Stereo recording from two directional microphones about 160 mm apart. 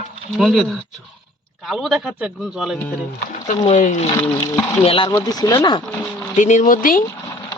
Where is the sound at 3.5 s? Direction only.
40° left (ahead or behind).